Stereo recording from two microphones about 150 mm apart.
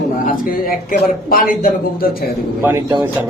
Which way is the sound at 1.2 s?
70° left (ahead or behind).